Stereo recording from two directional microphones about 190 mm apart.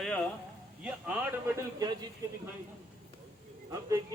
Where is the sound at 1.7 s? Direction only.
20° right (ahead or behind).